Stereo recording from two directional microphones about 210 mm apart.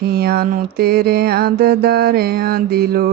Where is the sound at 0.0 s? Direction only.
50° right (ahead or behind).